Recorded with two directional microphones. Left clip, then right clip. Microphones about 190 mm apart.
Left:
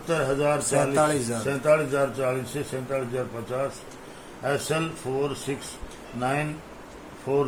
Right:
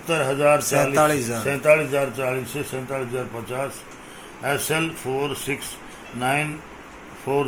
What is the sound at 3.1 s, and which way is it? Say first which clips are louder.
Speech: right 1 dB; 10° right (ahead or behind).